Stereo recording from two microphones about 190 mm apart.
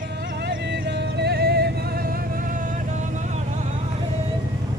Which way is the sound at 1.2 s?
60° right (ahead or behind).